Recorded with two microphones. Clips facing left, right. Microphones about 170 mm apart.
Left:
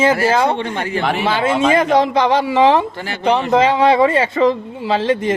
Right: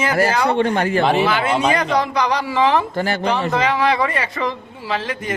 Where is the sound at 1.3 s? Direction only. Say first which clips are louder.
Left 3 dB; 25° left (ahead or behind).